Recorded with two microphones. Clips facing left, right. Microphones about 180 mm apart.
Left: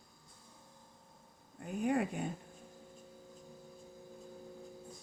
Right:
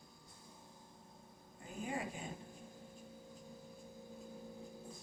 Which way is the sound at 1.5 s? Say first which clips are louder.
Left 10 dB; 60° left (ahead or behind).